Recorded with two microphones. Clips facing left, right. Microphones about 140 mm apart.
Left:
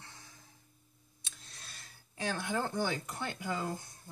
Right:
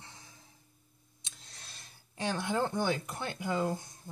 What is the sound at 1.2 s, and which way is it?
Speech, 20° right (ahead or behind).